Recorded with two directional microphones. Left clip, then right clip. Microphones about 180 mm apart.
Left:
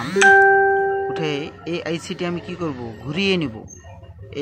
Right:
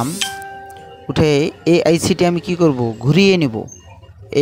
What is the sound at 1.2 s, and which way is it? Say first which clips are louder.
Speech: right 10 dB; 55° right (ahead or behind).